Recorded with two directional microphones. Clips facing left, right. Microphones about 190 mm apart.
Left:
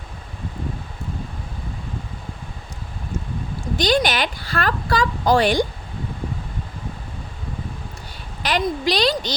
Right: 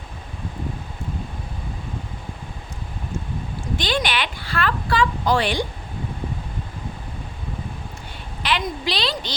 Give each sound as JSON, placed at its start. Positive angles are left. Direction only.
{"t": 3.8, "sound": "a woman's voice", "side_deg": 40}
{"t": 8.4, "sound": "a woman's voice", "side_deg": 45}